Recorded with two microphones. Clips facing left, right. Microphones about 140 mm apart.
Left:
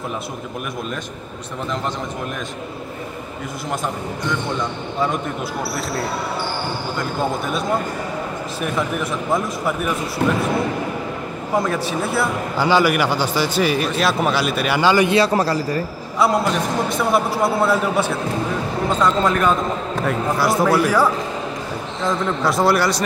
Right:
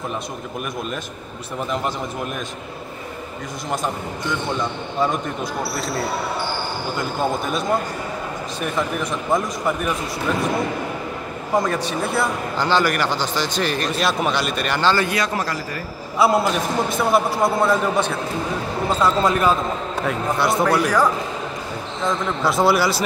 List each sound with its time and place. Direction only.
8.5 s speech: 5° left (ahead or behind)
11.5 s speech: 5° left (ahead or behind)
15.0 s a man's voice: 30° left (ahead or behind)
16.2 s speech: 5° right (ahead or behind)
18.9 s speech: 10° right (ahead or behind)